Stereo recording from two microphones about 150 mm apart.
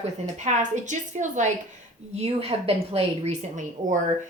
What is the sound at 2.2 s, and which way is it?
A woman's voice, 45° right (ahead or behind).